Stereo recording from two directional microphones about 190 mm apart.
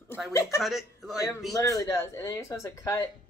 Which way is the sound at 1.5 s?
20° left (ahead or behind).